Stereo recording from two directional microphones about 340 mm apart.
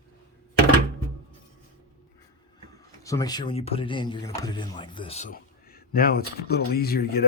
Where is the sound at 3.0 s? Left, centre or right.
Centre.